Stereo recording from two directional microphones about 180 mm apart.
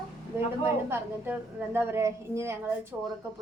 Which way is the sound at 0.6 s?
10° right (ahead or behind).